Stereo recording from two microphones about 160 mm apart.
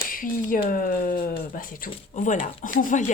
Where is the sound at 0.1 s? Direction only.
60° left (ahead or behind).